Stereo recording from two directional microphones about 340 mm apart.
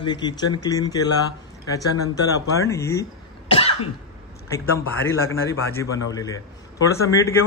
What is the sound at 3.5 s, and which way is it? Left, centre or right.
Cough, centre.